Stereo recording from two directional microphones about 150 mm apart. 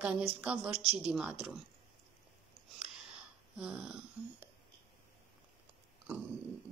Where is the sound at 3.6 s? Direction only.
5° right (ahead or behind).